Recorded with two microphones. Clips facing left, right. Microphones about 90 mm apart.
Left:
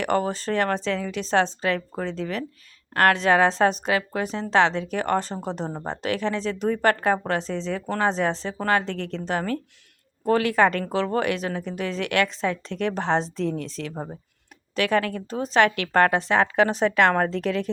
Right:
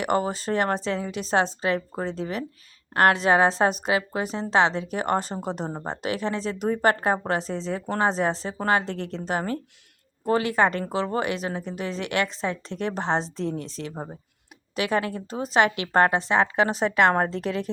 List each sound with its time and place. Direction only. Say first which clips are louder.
0.0 s a woman's voice: left 1 dB; 10° right (ahead or behind)
2.9 s a woman's voice: even; 10° right (ahead or behind)
8.9 s a woman's voice: left 1 dB; 40° right (ahead or behind)
10.2 s a woman's voice: left 2 dB; 5° right (ahead or behind)
16.1 s a woman's voice: left 1 dB; 5° right (ahead or behind)
17.2 s a woman's voice: left 1 dB; 30° right (ahead or behind)